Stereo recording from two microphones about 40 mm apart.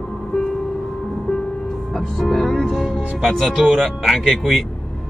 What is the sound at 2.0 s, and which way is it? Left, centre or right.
Music, centre.